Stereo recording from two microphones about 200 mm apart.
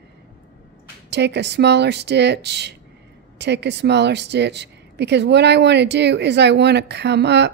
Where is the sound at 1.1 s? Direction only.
60° right (ahead or behind).